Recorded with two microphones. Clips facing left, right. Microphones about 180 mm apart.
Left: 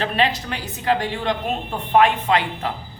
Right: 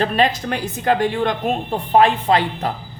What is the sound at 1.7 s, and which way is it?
Speech, 35° right (ahead or behind).